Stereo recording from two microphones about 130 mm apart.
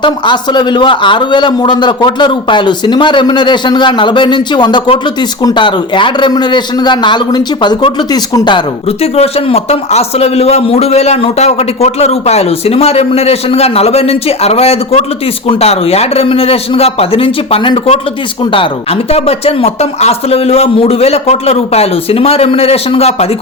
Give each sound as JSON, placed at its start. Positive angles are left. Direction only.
{"t": 0.0, "sound": "a man's voice", "side_deg": 35}
{"t": 9.1, "sound": "a man's voice", "side_deg": 50}
{"t": 19.1, "sound": "a man's voice", "side_deg": 50}